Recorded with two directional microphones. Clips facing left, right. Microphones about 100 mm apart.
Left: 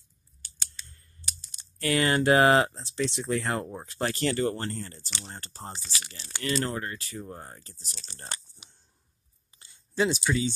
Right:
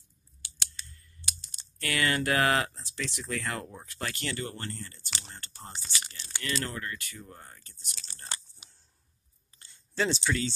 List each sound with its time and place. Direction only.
0.8 s computer keyboard: 30° left (ahead or behind)
1.8 s speech: 30° left (ahead or behind)
9.6 s a sound: 15° left (ahead or behind)